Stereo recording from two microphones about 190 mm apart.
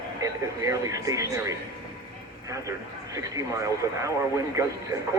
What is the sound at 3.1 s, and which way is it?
Speech, 15° right (ahead or behind).